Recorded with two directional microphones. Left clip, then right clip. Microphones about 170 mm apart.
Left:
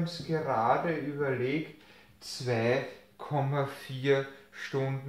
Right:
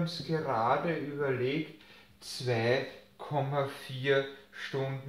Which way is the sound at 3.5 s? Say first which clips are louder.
Even; 30° left (ahead or behind).